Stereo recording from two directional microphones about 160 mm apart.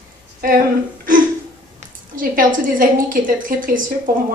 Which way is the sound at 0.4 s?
65° right (ahead or behind).